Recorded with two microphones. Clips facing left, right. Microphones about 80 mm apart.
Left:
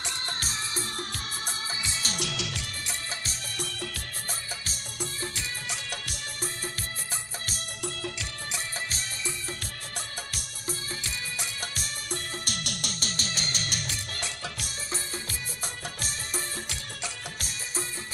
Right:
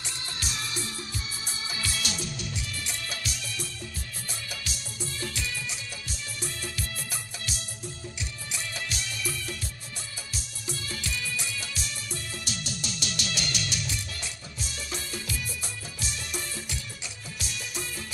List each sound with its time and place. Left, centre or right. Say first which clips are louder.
0.4 s music: left 1 dB; left
1.8 s music: right 1 dB; left
2.1 s music: left 2 dB; left
3.5 s music: left 3 dB; left
5.7 s music: left 3 dB; left
7.8 s music: left 6 dB; left
8.8 s music: right 1 dB; left
10.7 s music: right 1 dB; left
13.1 s music: right 3 dB; left